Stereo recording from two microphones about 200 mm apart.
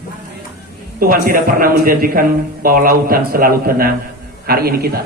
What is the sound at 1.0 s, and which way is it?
A man's voice, 45° right (ahead or behind).